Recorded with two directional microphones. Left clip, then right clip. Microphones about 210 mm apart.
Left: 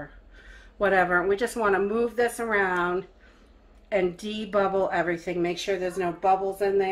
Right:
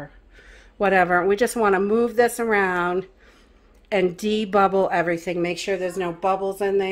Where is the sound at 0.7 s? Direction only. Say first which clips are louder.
Right 4 dB; 40° right (ahead or behind).